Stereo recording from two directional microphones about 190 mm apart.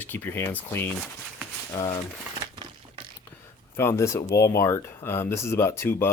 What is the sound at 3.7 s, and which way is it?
Speech, 15° left (ahead or behind).